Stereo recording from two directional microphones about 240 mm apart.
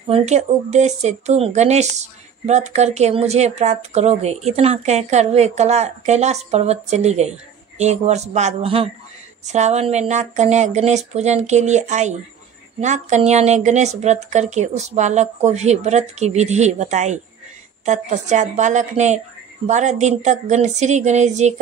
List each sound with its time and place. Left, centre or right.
0.0 s speech: right